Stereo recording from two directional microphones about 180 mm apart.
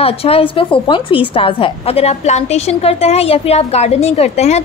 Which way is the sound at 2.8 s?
35° left (ahead or behind).